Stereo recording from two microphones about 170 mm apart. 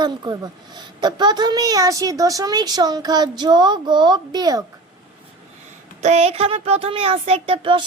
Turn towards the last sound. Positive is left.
turn(degrees=-30)  # may be behind; listen again after turning